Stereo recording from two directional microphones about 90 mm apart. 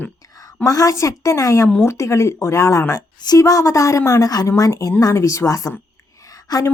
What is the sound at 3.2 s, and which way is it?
A woman's voice, 40° left (ahead or behind).